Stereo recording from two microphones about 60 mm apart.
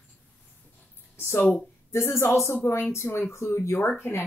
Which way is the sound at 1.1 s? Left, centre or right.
Left.